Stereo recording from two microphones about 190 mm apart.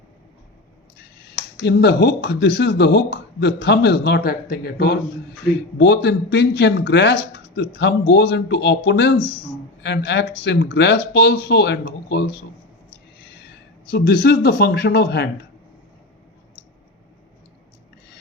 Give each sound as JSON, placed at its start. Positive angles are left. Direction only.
{"t": 1.6, "sound": "speech", "side_deg": 65}
{"t": 5.7, "sound": "speech", "side_deg": 65}
{"t": 13.9, "sound": "speech", "side_deg": 55}